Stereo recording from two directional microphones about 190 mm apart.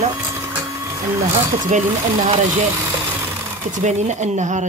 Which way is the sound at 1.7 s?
40° right (ahead or behind).